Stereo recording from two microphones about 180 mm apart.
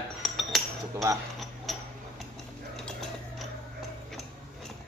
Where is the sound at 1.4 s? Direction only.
Centre (ahead or behind).